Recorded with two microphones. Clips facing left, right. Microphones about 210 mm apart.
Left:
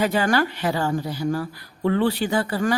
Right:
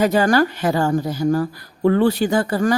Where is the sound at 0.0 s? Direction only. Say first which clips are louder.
Right 5 dB; 45° right (ahead or behind).